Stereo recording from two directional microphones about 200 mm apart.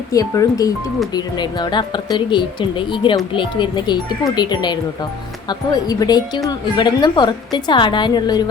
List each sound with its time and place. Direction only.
0.1 s speech: 15° left (ahead or behind)